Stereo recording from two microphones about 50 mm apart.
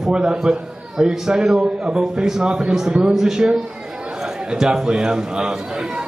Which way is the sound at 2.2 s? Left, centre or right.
Centre.